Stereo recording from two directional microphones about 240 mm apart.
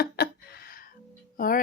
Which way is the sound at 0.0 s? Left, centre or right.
Left.